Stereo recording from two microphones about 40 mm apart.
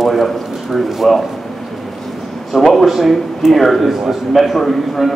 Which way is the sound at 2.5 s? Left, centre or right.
Centre.